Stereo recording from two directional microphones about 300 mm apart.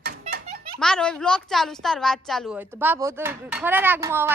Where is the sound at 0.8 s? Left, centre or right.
Centre.